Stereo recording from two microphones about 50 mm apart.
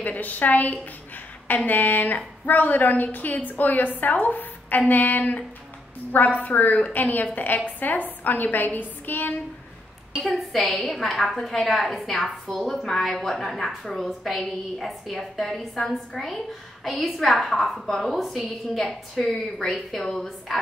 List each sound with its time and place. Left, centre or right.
0.0 s a woman's voice: left
10.3 s a woman's voice: centre